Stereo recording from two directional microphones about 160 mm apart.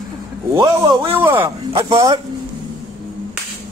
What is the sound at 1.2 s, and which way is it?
Speech, 15° right (ahead or behind).